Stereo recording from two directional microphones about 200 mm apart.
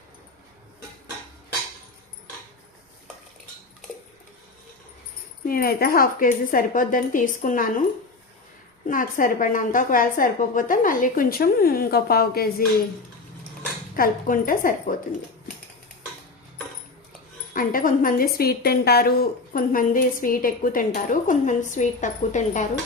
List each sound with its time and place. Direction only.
5.5 s a woman's voice: 50° left (ahead or behind)
8.9 s a woman's voice: 45° left (ahead or behind)
13.9 s a woman's voice: 45° left (ahead or behind)
17.5 s a woman's voice: 45° left (ahead or behind)